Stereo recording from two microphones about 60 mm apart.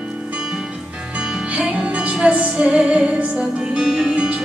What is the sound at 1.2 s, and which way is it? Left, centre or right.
Music, centre.